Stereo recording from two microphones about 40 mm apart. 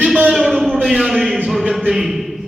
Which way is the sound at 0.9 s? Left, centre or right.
Centre.